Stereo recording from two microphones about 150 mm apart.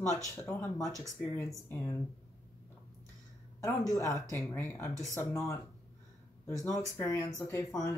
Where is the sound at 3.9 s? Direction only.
20° left (ahead or behind).